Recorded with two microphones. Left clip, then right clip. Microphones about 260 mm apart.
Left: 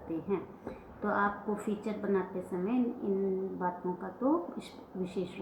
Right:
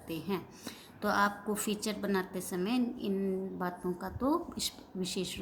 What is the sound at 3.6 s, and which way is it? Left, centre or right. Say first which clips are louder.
Speech: left 2 dB; right.